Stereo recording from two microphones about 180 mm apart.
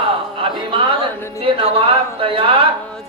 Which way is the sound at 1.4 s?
30° right (ahead or behind).